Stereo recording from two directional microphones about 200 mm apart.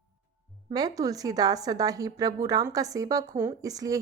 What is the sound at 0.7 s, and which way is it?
A woman's voice, 20° right (ahead or behind).